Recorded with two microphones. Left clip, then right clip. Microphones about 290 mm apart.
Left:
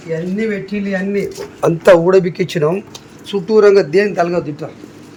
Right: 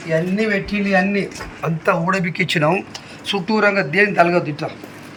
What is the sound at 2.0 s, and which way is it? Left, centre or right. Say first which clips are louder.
Speech: left 7 dB; centre.